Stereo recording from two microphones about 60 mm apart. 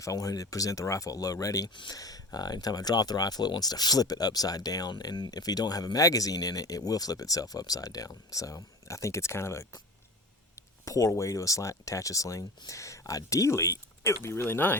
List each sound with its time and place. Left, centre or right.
0.0 s speech: left
10.5 s speech: left